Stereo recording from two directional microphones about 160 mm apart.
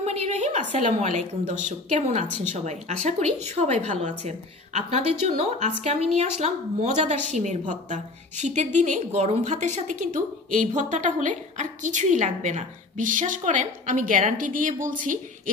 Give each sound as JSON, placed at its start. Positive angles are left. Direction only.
{"t": 0.0, "sound": "a woman's voice", "side_deg": -45}